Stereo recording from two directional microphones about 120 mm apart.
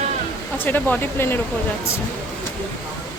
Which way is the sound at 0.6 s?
15° left (ahead or behind).